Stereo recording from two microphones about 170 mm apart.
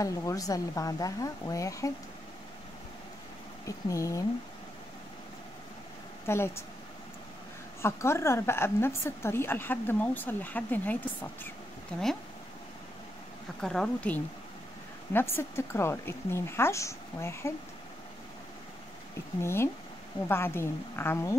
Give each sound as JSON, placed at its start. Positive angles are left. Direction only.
{"t": 0.0, "sound": "speech", "side_deg": 20}
{"t": 3.6, "sound": "speech", "side_deg": 20}
{"t": 6.2, "sound": "a woman's voice", "side_deg": 15}
{"t": 7.8, "sound": "a woman's voice", "side_deg": 15}
{"t": 13.6, "sound": "a woman's voice", "side_deg": 5}
{"t": 19.4, "sound": "a woman's voice", "side_deg": 15}